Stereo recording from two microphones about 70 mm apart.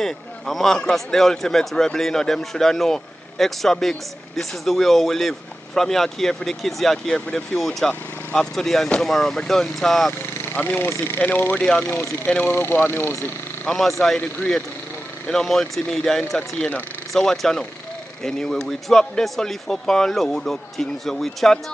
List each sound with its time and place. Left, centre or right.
0.0 s speech: centre
10.5 s speech: left
10.9 s speech: left
13.7 s speech: centre